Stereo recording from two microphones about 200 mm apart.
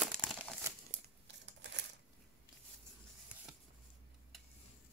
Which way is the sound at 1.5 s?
60° right (ahead or behind).